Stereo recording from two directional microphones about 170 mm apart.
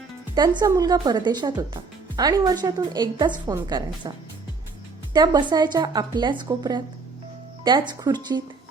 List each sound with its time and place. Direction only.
0.3 s speech: 20° right (ahead or behind)
5.1 s speech: 25° right (ahead or behind)